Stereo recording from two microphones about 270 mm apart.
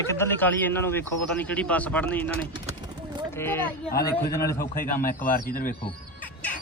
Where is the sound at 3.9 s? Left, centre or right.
Left.